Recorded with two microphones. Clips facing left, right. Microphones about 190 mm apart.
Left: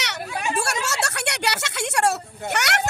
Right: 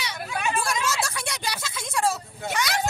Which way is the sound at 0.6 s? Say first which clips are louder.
Left 1 dB; 70° left (ahead or behind).